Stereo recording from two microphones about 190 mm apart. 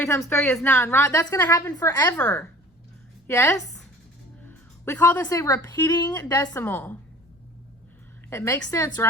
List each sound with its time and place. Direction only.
0.0 s a woman's voice: 15° left (ahead or behind)
8.3 s speech: 15° left (ahead or behind)